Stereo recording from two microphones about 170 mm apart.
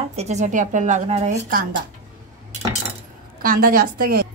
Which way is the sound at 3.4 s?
55° right (ahead or behind).